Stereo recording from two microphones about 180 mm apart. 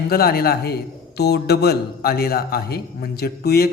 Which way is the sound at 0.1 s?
60° left (ahead or behind).